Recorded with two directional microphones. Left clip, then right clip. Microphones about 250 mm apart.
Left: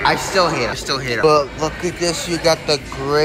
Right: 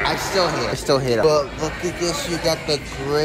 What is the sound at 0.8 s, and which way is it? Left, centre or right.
Speech, right.